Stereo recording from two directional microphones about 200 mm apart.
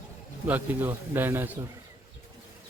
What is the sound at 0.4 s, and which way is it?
A man's voice, 10° right (ahead or behind).